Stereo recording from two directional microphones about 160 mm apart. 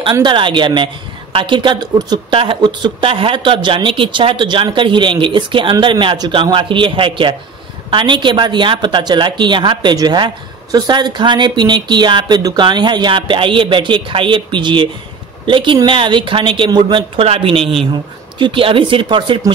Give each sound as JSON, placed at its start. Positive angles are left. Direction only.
{"t": 0.1, "sound": "speech", "side_deg": -30}